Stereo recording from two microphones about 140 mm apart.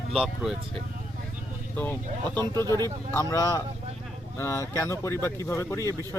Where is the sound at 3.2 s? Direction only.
20° left (ahead or behind).